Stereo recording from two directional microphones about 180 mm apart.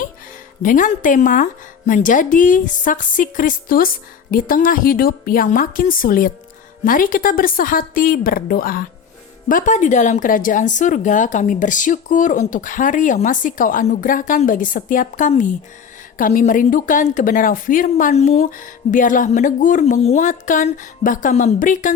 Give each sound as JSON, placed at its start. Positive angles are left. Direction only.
{"t": 0.6, "sound": "a woman's voice", "side_deg": 45}